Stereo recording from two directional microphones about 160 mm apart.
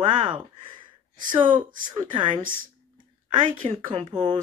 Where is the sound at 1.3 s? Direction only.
30° right (ahead or behind).